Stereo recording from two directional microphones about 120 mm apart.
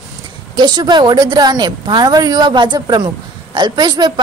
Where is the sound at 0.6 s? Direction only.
40° right (ahead or behind).